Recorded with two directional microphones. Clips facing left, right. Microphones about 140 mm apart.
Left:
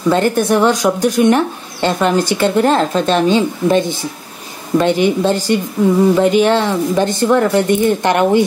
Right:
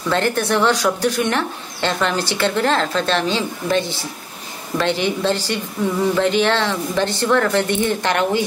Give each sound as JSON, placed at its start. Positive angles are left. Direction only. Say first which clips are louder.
{"t": 0.1, "sound": "a woman's voice", "louder": "left 5 dB", "side_deg": 15}
{"t": 5.3, "sound": "a woman's voice", "louder": "left 6 dB", "side_deg": 45}
{"t": 6.1, "sound": "a woman's voice", "louder": "left 5 dB", "side_deg": 10}